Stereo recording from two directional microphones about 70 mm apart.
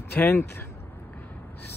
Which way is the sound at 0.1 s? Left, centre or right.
Left.